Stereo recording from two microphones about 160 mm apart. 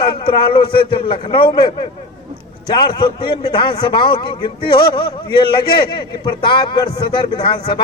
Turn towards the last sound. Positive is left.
turn(degrees=30)  # may be behind; listen again after turning